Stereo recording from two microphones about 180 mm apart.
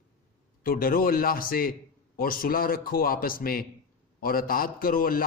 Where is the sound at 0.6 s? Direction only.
50° left (ahead or behind).